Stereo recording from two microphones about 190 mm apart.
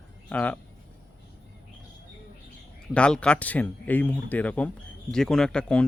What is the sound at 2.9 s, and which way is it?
Speech, 5° left (ahead or behind).